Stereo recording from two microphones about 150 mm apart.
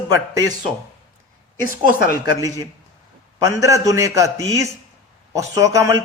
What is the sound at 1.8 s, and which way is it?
Speech, 25° right (ahead or behind).